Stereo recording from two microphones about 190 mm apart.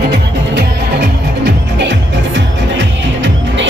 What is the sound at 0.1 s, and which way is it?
Music, 60° right (ahead or behind).